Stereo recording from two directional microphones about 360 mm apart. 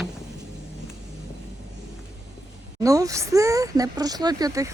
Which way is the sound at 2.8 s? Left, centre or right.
Centre.